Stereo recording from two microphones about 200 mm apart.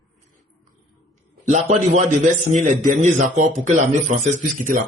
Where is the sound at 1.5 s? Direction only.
35° right (ahead or behind).